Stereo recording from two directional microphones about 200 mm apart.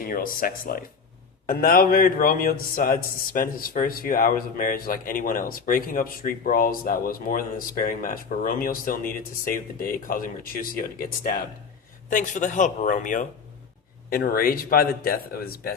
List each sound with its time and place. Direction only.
0.0 s a man's voice: 45° left (ahead or behind)